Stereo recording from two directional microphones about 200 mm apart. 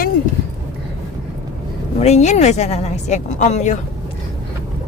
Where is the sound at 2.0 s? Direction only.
35° left (ahead or behind).